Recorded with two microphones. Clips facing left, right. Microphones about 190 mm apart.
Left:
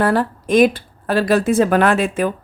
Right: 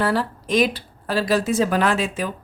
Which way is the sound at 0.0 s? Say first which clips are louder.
Left 5 dB; 50° left (ahead or behind).